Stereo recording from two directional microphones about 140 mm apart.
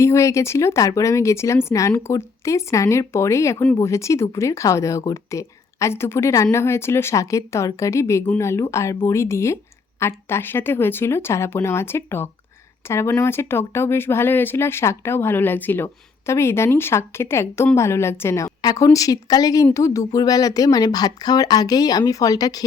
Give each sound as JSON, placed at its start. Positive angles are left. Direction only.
{"t": 0.0, "sound": "speech", "side_deg": 20}